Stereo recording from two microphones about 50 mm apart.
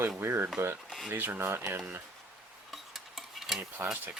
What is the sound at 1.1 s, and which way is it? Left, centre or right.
Speech, right.